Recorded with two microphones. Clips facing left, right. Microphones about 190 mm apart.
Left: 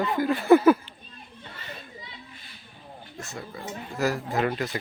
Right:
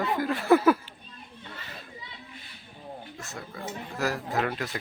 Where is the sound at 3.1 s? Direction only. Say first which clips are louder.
Left 2 dB; centre (ahead or behind).